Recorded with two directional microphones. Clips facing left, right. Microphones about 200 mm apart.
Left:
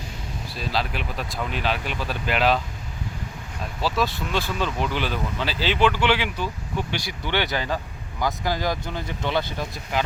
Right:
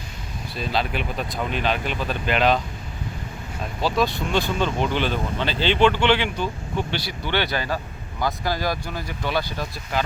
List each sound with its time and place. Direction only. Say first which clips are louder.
0.5 s speech: right 3 dB; centre (ahead or behind)
3.8 s speech: right 3 dB; centre (ahead or behind); by 10.0 s 20° left (ahead or behind)